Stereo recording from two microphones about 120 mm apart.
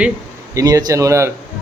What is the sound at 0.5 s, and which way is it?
Speech, 25° right (ahead or behind).